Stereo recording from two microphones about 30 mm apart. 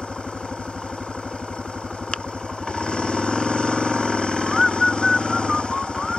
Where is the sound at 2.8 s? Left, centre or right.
Left.